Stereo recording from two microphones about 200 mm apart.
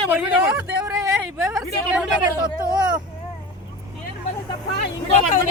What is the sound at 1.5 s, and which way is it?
Speech, 5° right (ahead or behind).